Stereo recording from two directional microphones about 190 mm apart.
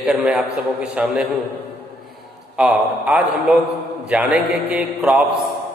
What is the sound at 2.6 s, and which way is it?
A man's voice, 5° right (ahead or behind).